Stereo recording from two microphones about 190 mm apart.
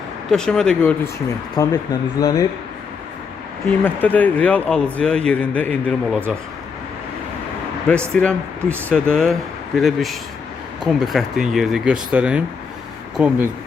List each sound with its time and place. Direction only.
0.3 s speech: 5° left (ahead or behind)
1.5 s speech: 20° left (ahead or behind)
3.8 s a man's voice: 10° left (ahead or behind)
7.9 s speech: 5° left (ahead or behind)